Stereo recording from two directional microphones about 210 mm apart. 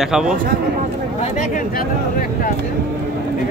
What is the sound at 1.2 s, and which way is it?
Speech, 40° left (ahead or behind).